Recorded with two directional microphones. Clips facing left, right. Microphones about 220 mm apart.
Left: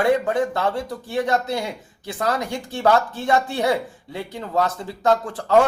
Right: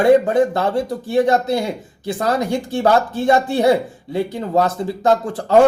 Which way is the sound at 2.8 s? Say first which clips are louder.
Right 2 dB; 35° right (ahead or behind).